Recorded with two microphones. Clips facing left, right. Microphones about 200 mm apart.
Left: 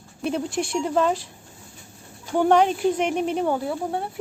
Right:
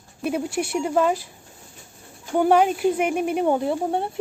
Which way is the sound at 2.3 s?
5° right (ahead or behind).